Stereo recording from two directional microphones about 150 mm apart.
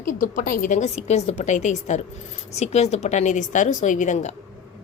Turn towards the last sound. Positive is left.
turn(degrees=50)  # may be behind; listen again after turning